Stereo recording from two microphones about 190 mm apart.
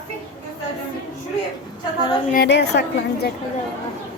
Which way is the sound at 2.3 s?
60° left (ahead or behind).